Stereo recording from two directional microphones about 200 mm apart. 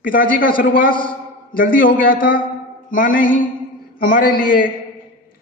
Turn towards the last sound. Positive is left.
turn(degrees=45)  # may be behind; listen again after turning